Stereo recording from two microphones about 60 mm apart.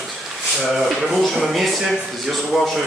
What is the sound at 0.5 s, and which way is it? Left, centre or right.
A man's voice, centre.